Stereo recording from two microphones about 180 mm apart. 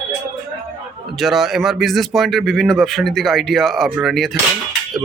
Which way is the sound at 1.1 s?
Centre (ahead or behind).